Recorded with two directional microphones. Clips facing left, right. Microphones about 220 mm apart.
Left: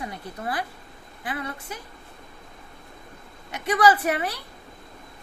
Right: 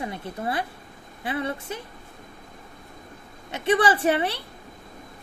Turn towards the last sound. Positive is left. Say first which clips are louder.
# right 1 dB
turn(degrees=-30)  # may be behind; listen again after turning